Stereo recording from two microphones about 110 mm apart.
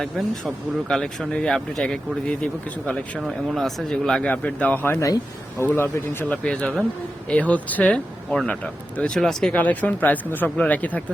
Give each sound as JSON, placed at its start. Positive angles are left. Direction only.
{"t": 0.0, "sound": "speech", "side_deg": 0}
{"t": 3.2, "sound": "speech", "side_deg": 0}
{"t": 4.9, "sound": "speech", "side_deg": 30}